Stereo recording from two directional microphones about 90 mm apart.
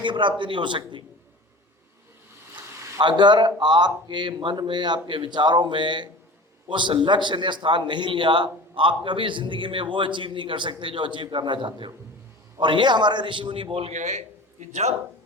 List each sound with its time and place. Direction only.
0.0 s a man's voice: 60° right (ahead or behind)
3.0 s a man's voice: 55° right (ahead or behind); by 13.9 s 85° right